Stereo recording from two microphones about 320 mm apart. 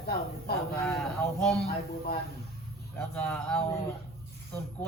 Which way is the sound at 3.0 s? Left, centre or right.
Centre.